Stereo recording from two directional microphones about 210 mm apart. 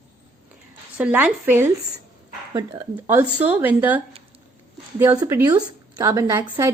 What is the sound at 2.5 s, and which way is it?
A woman's voice, 20° right (ahead or behind).